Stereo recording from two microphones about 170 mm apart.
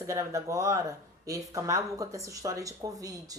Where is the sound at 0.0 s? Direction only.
20° right (ahead or behind).